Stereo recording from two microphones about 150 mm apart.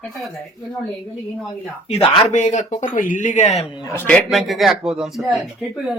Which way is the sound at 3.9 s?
15° left (ahead or behind).